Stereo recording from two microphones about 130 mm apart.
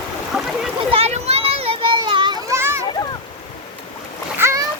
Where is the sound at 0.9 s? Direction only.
55° right (ahead or behind); by 2.3 s 35° right (ahead or behind).